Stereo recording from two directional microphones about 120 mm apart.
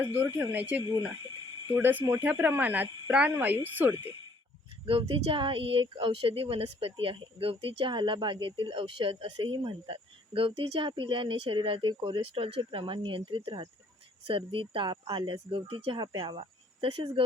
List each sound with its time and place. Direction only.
0.1 s speech: 15° right (ahead or behind)
4.9 s speech: 50° right (ahead or behind)